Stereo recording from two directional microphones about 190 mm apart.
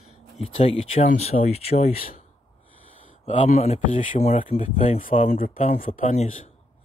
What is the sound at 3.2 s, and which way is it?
Speech, 35° left (ahead or behind).